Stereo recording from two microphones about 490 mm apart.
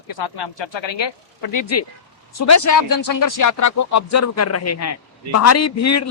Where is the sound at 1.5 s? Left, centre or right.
Left.